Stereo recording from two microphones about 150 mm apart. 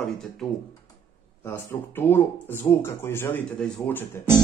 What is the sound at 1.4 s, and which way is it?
A man's voice, 15° left (ahead or behind).